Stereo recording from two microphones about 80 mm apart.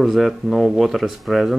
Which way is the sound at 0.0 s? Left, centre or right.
Centre.